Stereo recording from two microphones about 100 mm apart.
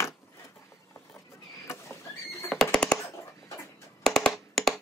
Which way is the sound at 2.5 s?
5° right (ahead or behind).